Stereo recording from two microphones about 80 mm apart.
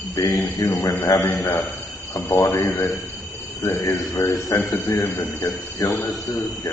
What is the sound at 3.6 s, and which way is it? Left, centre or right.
Speech, left.